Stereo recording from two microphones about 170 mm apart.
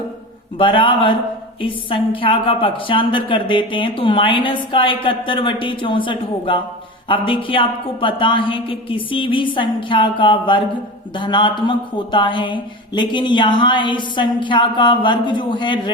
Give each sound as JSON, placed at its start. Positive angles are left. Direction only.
{"t": 0.6, "sound": "speech", "side_deg": 30}